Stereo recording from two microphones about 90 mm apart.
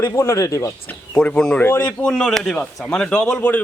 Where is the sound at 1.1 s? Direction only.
10° left (ahead or behind).